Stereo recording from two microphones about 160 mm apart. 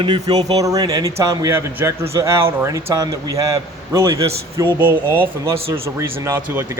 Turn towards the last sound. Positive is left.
turn(degrees=-15)  # may be behind; listen again after turning